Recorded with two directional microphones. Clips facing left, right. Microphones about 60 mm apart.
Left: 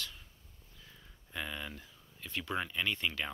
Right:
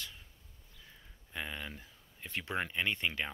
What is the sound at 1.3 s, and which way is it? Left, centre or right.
Speech, centre.